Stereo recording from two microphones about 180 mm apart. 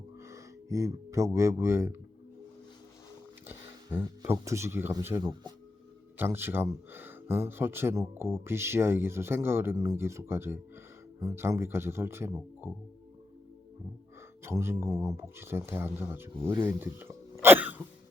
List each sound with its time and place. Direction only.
0.2 s speech: 15° right (ahead or behind)
3.4 s a sound: 10° right (ahead or behind)
4.0 s speech: 15° right (ahead or behind)
6.1 s speech: 15° right (ahead or behind)
14.4 s speech: 15° right (ahead or behind)
17.4 s throat clearing: 10° right (ahead or behind)